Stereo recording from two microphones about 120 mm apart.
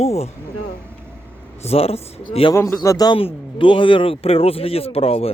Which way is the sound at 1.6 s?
55° left (ahead or behind).